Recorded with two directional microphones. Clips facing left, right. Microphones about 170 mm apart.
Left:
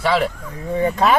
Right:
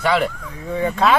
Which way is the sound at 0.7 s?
20° left (ahead or behind).